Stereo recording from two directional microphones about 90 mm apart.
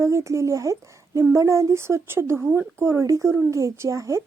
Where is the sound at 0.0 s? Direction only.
30° right (ahead or behind).